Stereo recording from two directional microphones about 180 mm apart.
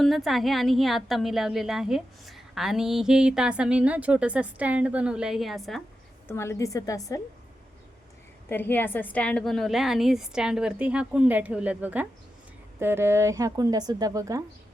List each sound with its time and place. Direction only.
0.0 s a woman's voice: centre (ahead or behind)
6.2 s a woman's voice: 15° left (ahead or behind)
8.4 s a woman's voice: 10° left (ahead or behind); by 14.4 s 20° right (ahead or behind)